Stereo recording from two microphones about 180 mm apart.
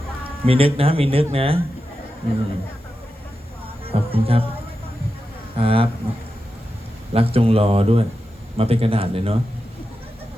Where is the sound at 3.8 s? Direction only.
30° right (ahead or behind).